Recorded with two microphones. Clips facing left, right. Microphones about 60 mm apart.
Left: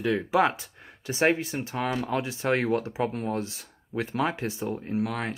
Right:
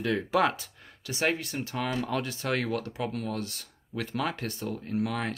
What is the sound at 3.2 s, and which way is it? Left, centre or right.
Speech, left.